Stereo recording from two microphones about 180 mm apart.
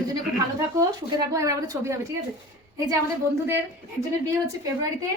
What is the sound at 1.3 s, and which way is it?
Speech, 20° right (ahead or behind).